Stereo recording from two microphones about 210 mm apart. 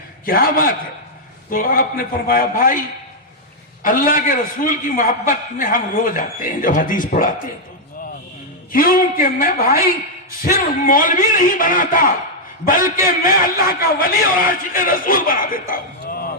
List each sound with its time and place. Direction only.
0.3 s a man's voice: 45° left (ahead or behind)
3.8 s a man's voice: 40° left (ahead or behind)
8.7 s a man's voice: 45° left (ahead or behind)